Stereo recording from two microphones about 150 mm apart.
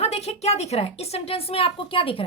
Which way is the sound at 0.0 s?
45° left (ahead or behind).